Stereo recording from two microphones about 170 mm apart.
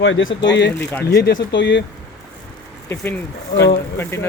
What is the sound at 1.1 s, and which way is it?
Speech, 80° left.